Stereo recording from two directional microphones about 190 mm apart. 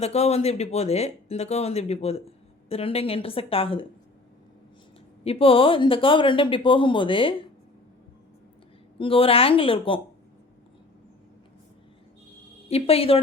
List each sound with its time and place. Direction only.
0.0 s speech: 35° left (ahead or behind)
5.2 s speech: 30° left (ahead or behind)
9.0 s speech: 30° left (ahead or behind)
12.6 s speech: 30° left (ahead or behind)